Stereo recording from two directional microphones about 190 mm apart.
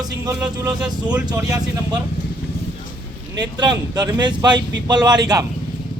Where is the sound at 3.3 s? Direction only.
20° right (ahead or behind).